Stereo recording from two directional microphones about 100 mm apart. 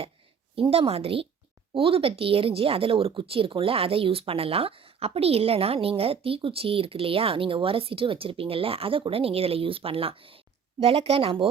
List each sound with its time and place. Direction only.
0.5 s speech: 75° right (ahead or behind)